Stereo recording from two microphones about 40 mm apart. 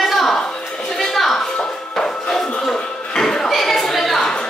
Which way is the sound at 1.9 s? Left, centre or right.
Centre.